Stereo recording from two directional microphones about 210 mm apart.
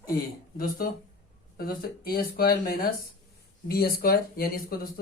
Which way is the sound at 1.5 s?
45° left (ahead or behind).